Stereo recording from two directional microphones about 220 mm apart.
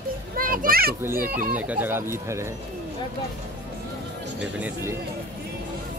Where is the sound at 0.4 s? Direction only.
40° right (ahead or behind).